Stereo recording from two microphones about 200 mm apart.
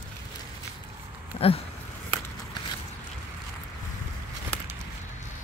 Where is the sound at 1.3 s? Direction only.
30° left (ahead or behind).